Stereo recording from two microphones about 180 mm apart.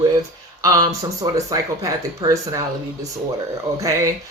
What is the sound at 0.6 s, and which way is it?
Speech, 20° right (ahead or behind).